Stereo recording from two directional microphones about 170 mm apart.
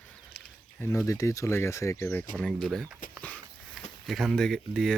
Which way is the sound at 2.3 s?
5° left (ahead or behind).